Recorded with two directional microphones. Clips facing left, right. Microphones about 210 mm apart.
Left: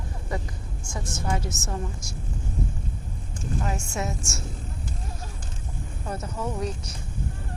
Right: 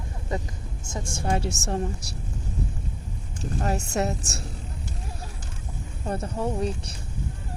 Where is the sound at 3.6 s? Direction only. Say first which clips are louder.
Right 6 dB; 40° right (ahead or behind).